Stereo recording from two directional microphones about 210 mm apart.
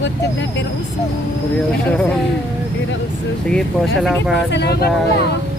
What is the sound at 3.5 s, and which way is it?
Speech, 5° left (ahead or behind).